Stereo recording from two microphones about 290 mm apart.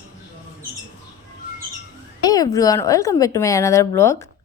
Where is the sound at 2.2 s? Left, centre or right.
Centre.